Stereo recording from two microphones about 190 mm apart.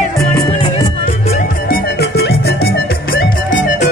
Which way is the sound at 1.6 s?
55° left (ahead or behind).